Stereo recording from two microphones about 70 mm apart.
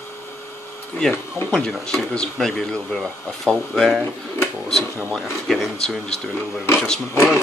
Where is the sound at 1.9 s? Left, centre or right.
Centre.